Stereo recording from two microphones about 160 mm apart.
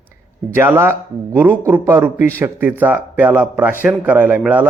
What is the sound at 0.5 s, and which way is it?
A man's voice, 15° right (ahead or behind).